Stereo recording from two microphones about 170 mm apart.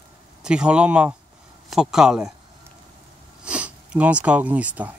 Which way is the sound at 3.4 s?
5° right (ahead or behind).